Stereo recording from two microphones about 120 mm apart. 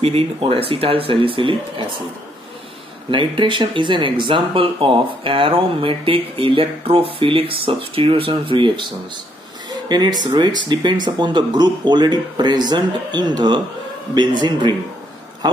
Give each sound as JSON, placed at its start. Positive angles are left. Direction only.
{"t": 0.0, "sound": "speech", "side_deg": -55}
{"t": 3.1, "sound": "speech", "side_deg": -45}